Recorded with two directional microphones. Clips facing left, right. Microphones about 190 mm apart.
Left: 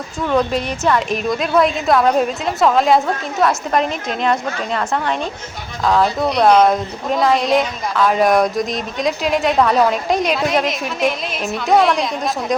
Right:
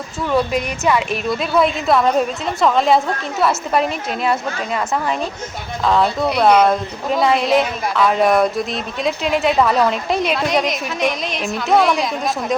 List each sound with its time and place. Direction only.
0.3 s a woman's voice: 5° right (ahead or behind)